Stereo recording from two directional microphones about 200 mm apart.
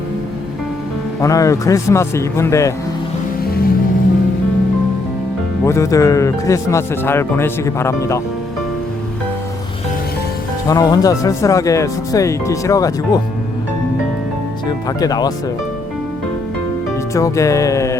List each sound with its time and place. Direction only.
1.2 s speech: 15° left (ahead or behind)
3.4 s music: 50° left (ahead or behind)
5.6 s speech: 15° left (ahead or behind)
10.7 s speech: 20° left (ahead or behind)
14.8 s speech: 20° left (ahead or behind)
17.2 s speech: 15° left (ahead or behind)